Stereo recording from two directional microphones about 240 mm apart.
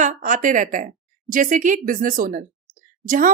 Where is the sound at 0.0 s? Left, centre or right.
Right.